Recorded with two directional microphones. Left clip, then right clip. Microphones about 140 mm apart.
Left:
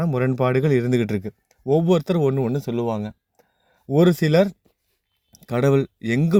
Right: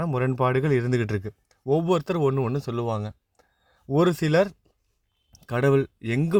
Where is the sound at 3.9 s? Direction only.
50° left (ahead or behind).